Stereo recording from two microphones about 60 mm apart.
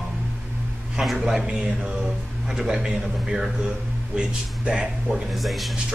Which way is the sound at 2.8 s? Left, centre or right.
Centre.